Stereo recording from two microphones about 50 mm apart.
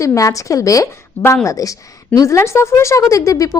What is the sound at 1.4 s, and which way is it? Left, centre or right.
A woman's voice, left.